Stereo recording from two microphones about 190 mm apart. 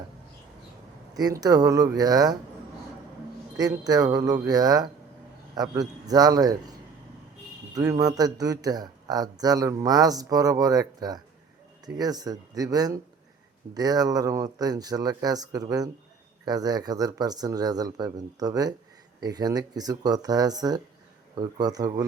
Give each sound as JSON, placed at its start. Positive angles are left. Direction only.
{"t": 1.1, "sound": "speech", "side_deg": -20}
{"t": 3.6, "sound": "speech", "side_deg": -20}
{"t": 7.8, "sound": "speech", "side_deg": -20}